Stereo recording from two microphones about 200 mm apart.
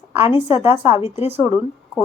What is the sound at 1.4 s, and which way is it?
Speech, 15° right (ahead or behind).